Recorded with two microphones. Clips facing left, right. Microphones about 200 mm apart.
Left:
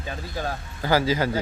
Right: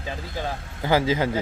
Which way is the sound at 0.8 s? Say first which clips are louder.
Right 1 dB; 20° right (ahead or behind).